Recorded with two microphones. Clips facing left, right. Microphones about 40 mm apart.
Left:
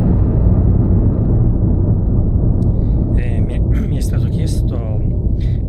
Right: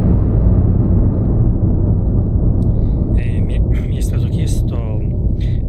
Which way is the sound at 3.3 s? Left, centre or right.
Right.